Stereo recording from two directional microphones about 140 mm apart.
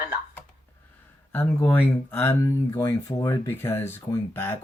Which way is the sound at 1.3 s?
15° left (ahead or behind).